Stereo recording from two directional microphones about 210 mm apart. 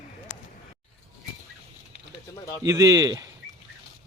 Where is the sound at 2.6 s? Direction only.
15° right (ahead or behind).